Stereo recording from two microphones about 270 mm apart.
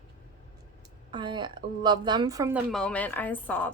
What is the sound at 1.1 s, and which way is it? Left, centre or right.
A woman's voice, centre.